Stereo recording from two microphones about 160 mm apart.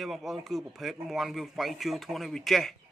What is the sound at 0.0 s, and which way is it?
A man's voice, centre (ahead or behind).